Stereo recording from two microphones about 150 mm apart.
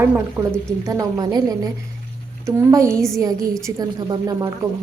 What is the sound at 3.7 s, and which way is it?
Speech, 25° right (ahead or behind).